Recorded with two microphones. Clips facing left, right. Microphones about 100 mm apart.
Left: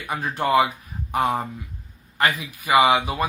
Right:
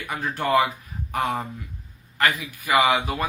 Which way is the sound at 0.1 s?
20° left (ahead or behind).